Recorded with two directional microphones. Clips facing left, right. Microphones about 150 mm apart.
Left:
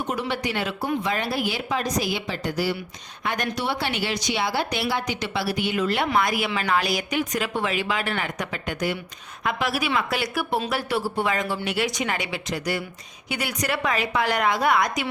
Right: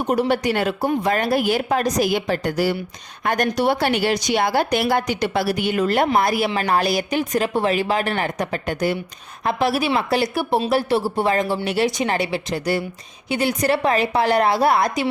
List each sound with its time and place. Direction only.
0.2 s a woman's voice: 40° right (ahead or behind)